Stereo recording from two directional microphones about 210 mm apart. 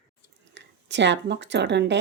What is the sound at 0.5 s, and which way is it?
A woman's voice, 55° right (ahead or behind).